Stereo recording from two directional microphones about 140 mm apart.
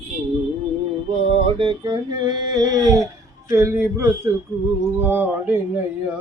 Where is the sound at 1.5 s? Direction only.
35° right (ahead or behind); by 4.3 s 20° right (ahead or behind).